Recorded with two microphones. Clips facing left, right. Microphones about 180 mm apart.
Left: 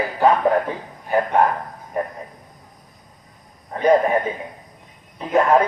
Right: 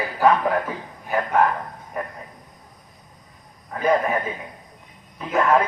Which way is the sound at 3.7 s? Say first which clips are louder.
Left 4 dB; 30° left (ahead or behind).